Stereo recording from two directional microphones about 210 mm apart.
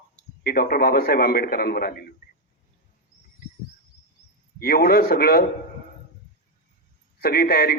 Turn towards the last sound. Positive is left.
turn(degrees=45)  # may be behind; listen again after turning